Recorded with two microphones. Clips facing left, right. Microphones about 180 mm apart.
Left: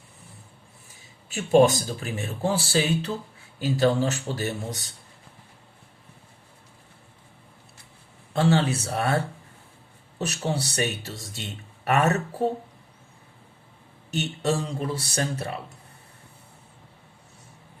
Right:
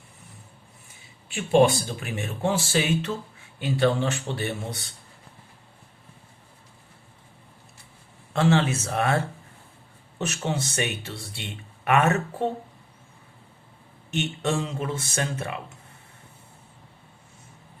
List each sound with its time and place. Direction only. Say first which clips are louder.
1.3 s speech: left 1 dB; 40° left (ahead or behind)
8.3 s speech: even; 35° left (ahead or behind)
10.2 s speech: even; 35° left (ahead or behind)
14.1 s speech: left 1 dB; 40° left (ahead or behind)